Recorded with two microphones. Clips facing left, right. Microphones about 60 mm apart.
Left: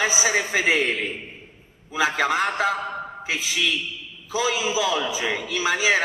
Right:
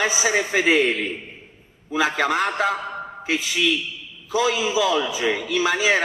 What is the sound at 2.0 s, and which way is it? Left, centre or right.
Speech, centre.